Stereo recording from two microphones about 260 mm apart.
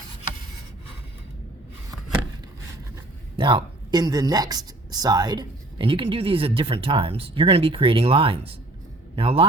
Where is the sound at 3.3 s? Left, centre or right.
Centre.